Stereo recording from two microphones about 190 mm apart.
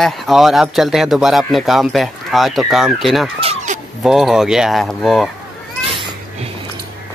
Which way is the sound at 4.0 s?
Centre (ahead or behind).